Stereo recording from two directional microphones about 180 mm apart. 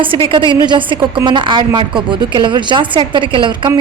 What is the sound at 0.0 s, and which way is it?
A woman's voice, 30° right (ahead or behind).